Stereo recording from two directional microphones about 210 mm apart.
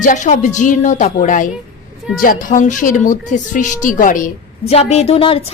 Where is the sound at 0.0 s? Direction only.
35° left (ahead or behind).